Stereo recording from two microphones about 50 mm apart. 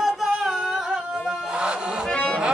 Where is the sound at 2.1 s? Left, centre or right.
Centre.